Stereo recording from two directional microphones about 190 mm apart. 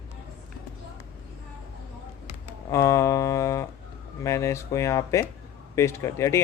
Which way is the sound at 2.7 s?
15° left (ahead or behind).